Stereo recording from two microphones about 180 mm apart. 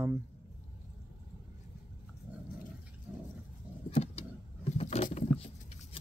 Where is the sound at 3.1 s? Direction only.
5° right (ahead or behind).